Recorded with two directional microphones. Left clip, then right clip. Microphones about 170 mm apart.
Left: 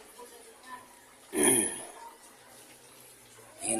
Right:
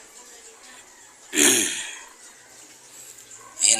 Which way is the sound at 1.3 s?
Centre (ahead or behind).